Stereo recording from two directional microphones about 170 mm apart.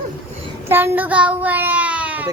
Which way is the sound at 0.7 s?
10° right (ahead or behind).